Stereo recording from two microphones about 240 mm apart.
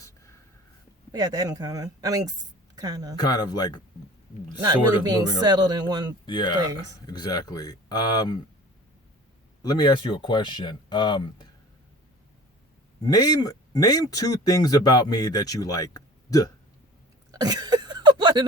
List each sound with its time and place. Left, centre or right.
1.1 s speech: centre
3.2 s speech: centre
5.0 s speech: centre
6.2 s speech: centre
9.6 s speech: centre
13.0 s speech: centre
17.3 s a sound: centre